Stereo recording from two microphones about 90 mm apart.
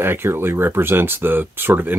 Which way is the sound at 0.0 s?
25° right (ahead or behind).